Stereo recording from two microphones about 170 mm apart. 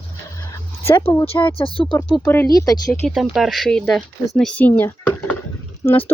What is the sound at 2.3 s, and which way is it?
Speech, 20° left (ahead or behind).